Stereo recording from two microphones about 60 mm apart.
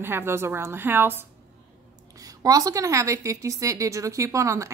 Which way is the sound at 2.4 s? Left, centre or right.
Right.